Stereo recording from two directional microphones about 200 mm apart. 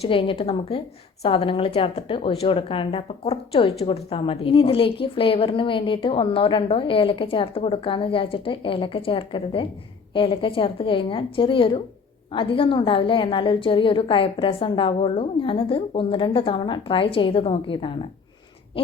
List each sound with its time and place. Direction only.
0.0 s a woman's voice: 25° left (ahead or behind)